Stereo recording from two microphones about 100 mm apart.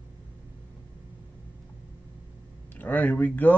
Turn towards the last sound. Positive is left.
turn(degrees=15)  # may be behind; listen again after turning